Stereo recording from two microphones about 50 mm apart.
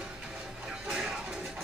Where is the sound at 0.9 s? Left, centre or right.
Centre.